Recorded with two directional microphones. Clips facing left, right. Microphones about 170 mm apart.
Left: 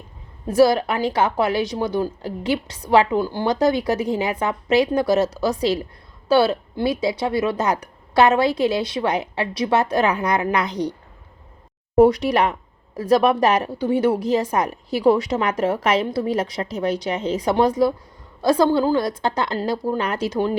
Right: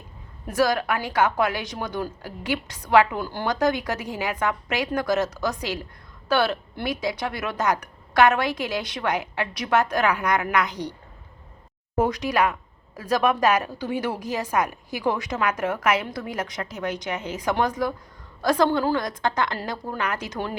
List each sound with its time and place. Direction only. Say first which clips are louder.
0.4 s a woman's voice: left 6 dB; 30° left (ahead or behind)
11.9 s a woman's voice: left 7 dB; 30° left (ahead or behind)